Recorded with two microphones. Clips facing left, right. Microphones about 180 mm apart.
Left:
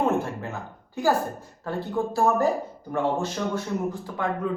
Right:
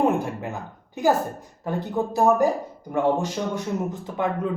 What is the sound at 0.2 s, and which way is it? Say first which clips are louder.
A man's voice: right 1 dB; 15° right (ahead or behind).